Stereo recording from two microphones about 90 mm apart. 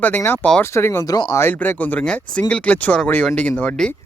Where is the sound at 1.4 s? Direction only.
20° left (ahead or behind).